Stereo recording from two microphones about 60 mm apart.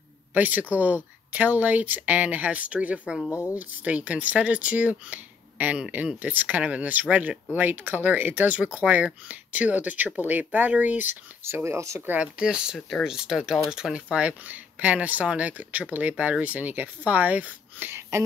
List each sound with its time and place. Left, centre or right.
0.3 s speech: right
11.4 s speech: right
12.1 s speech: centre
14.1 s speech: right